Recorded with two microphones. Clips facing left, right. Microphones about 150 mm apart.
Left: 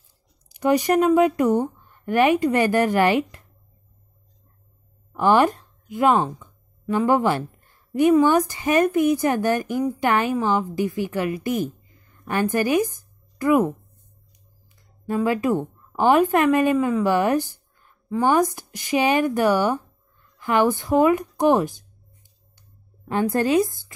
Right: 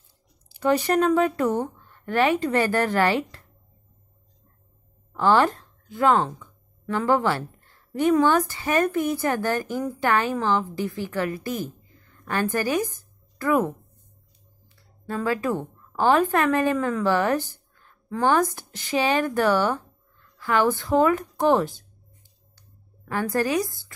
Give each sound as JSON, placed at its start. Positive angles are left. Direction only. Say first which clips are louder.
{"t": 0.5, "sound": "speech", "louder": "left 2 dB", "side_deg": 15}
{"t": 5.1, "sound": "a woman's voice", "louder": "left 2 dB", "side_deg": 15}
{"t": 14.8, "sound": "a woman's voice", "louder": "left 6 dB", "side_deg": 15}
{"t": 22.6, "sound": "a sound", "louder": "left 1 dB", "side_deg": 20}